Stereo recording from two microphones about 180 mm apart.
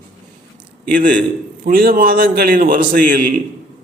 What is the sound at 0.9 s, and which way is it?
A man's voice, 50° right (ahead or behind).